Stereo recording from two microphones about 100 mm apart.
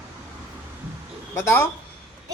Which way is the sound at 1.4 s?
25° left (ahead or behind).